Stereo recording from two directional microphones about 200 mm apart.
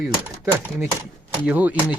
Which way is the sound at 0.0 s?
15° right (ahead or behind).